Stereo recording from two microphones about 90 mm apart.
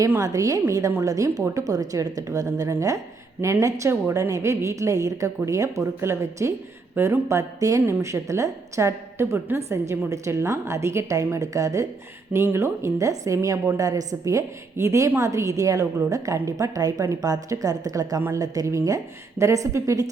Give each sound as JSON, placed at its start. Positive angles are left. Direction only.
{"t": 0.2, "sound": "a woman's voice", "side_deg": -40}
{"t": 7.8, "sound": "speech", "side_deg": -20}
{"t": 8.0, "sound": "a woman's voice", "side_deg": -35}